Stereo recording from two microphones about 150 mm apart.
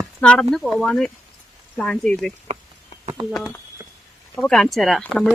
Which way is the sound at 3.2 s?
35° right (ahead or behind).